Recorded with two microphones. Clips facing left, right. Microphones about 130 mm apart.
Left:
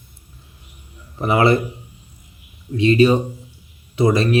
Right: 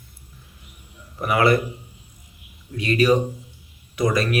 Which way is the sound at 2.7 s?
25° left (ahead or behind).